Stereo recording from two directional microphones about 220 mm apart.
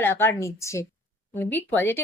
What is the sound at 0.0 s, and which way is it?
Speech, 10° left (ahead or behind).